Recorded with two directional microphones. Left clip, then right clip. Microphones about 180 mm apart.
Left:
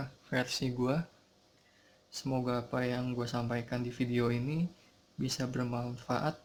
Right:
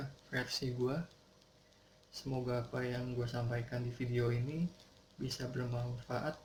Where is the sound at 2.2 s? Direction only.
55° left (ahead or behind).